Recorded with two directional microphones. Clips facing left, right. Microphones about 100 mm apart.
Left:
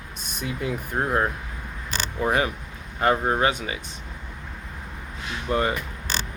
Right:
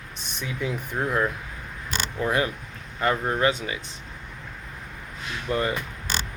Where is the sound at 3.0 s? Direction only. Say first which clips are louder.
Left 3 dB; 35° left (ahead or behind).